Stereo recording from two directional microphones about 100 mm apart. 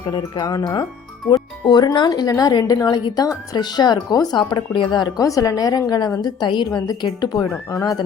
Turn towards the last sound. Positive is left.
turn(degrees=35)  # may be behind; listen again after turning